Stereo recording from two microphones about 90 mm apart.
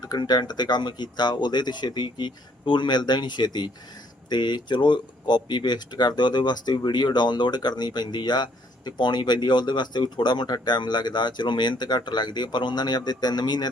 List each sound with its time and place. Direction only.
0.0 s speech: 50° left (ahead or behind)